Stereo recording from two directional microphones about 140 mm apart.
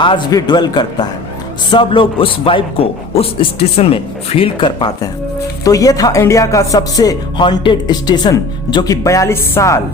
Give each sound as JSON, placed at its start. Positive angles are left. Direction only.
{"t": 0.3, "sound": "a man's voice", "side_deg": 30}